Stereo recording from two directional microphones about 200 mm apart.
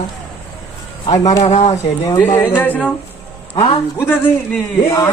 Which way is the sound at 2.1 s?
15° left (ahead or behind).